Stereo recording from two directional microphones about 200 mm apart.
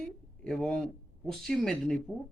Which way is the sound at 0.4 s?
5° left (ahead or behind).